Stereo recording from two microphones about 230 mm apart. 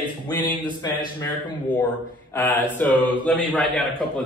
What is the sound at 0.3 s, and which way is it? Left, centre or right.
Speech, centre.